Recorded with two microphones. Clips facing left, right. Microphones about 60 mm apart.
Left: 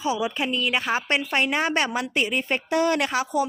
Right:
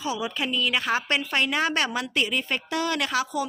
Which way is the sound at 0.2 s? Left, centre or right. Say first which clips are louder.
Left 2 dB; centre.